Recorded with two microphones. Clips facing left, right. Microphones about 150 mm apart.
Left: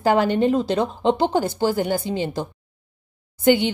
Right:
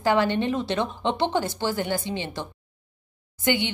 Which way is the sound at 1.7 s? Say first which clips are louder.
Left 5 dB; 10° left (ahead or behind).